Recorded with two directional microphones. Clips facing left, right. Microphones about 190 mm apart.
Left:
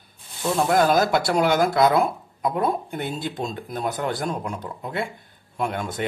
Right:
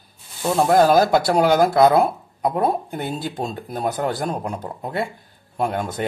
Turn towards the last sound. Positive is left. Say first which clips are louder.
# right 3 dB
turn(degrees=-35)  # may be behind; listen again after turning